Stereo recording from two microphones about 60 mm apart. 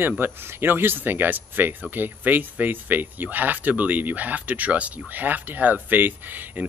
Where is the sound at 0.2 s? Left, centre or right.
Right.